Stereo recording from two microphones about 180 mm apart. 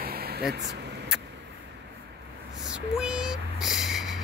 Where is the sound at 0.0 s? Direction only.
60° right (ahead or behind).